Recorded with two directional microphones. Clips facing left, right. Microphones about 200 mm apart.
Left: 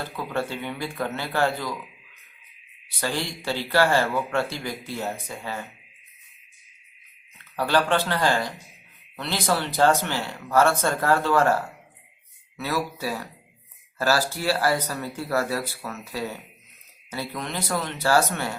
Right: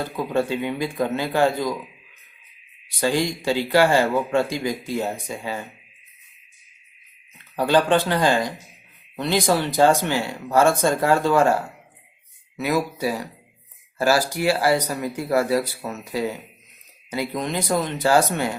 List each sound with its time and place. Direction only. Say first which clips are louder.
0.0 s a man's voice: right 6 dB; 15° right (ahead or behind)
3.0 s a man's voice: right 7 dB; 15° right (ahead or behind)
7.5 s a man's voice: right 4 dB; 15° right (ahead or behind)